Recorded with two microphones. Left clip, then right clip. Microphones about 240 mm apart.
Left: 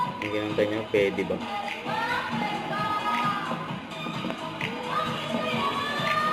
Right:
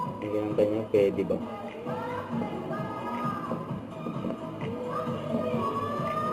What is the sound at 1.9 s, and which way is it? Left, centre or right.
Music, centre.